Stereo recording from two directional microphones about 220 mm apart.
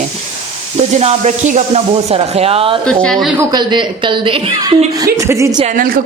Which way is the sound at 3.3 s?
20° right (ahead or behind).